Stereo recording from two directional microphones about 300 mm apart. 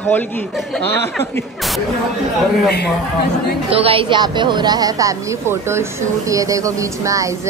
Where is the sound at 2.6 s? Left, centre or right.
Left.